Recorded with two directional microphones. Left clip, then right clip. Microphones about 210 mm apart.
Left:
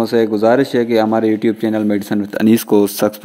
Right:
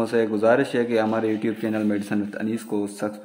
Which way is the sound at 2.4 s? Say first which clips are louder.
Left 15 dB; 45° left (ahead or behind).